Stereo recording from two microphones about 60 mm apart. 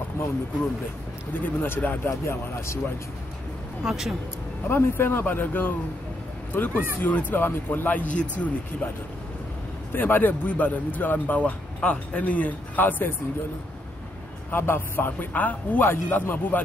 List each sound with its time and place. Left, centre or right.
1.4 s a man's voice: left
3.8 s speech: centre
4.6 s a man's voice: left
9.9 s speech: left
14.5 s a man's voice: left